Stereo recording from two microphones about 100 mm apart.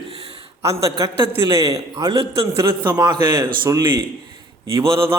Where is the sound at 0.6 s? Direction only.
30° right (ahead or behind).